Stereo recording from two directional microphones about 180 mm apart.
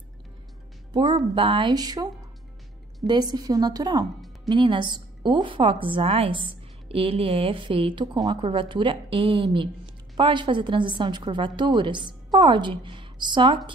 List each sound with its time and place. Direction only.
0.9 s a woman's voice: 25° right (ahead or behind)
3.1 s a woman's voice: 25° right (ahead or behind)